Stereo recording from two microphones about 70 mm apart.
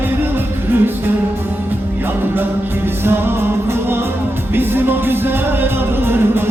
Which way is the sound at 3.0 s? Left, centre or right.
Right.